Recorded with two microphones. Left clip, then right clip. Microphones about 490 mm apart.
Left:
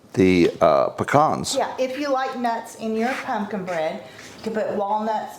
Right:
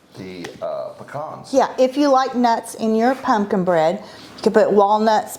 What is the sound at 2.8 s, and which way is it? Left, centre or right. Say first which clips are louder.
A woman's voice: right 6 dB; right.